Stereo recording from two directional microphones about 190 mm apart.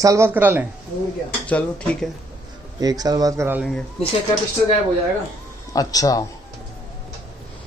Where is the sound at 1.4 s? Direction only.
5° left (ahead or behind).